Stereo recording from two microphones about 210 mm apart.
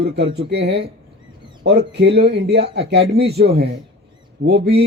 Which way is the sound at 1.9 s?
55° right (ahead or behind).